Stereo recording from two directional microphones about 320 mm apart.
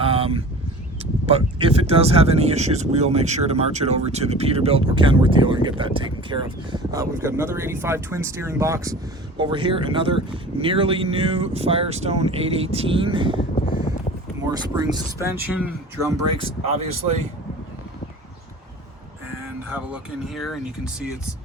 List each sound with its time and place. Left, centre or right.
0.0 s a sound: centre
1.3 s speech: centre
13.6 s a sound: left
14.5 s speech: centre
16.4 s speech: centre
19.7 s speech: centre